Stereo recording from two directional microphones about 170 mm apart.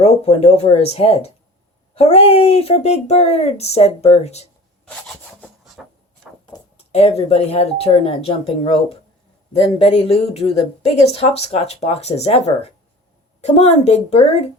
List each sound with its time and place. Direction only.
0.0 s speech: 35° left (ahead or behind)
5.0 s rub: centre (ahead or behind)
6.9 s speech: 35° left (ahead or behind)